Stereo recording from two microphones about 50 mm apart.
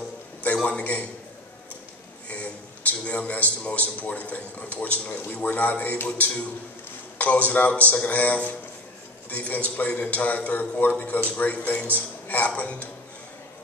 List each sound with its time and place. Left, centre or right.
0.4 s a man's voice: left
2.2 s a man's voice: left